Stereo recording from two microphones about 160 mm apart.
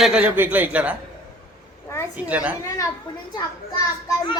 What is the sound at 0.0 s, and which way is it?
Speech, 5° right (ahead or behind).